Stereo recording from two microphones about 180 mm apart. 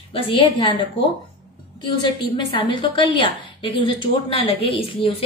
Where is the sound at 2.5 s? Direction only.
25° left (ahead or behind).